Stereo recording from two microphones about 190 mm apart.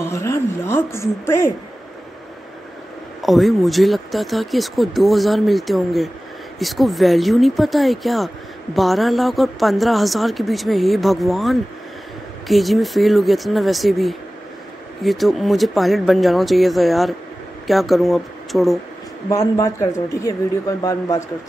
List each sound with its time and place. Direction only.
0.0 s a woman's voice: 15° left (ahead or behind)
3.2 s speech: centre (ahead or behind)
19.2 s a woman's voice: 20° left (ahead or behind)